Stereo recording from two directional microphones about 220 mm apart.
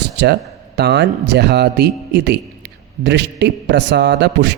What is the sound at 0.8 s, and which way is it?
A man's voice, 50° right (ahead or behind).